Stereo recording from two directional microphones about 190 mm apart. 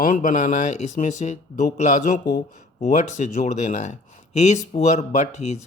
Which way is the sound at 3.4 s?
40° left (ahead or behind).